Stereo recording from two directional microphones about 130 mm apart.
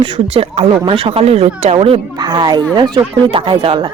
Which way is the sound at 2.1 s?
30° right (ahead or behind).